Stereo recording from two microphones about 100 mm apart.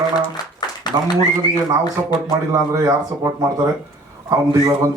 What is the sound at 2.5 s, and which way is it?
A man's voice, 35° right (ahead or behind).